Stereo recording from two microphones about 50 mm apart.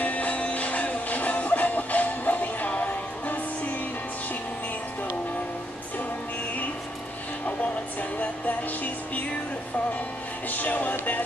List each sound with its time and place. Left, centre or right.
0.0 s music: left
8.2 s music: left
10.5 s music: left